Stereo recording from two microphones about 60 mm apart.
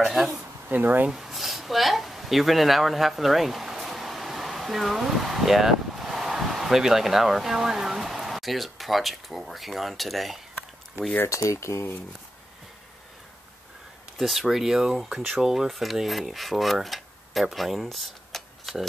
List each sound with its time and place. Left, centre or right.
0.0 s speech: centre
0.7 s speech: right
1.0 s speech: centre
11.2 s speech: left
14.1 s speech: centre
15.1 s a sound: centre